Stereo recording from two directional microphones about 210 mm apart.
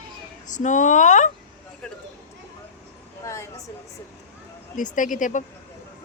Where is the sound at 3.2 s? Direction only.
15° left (ahead or behind).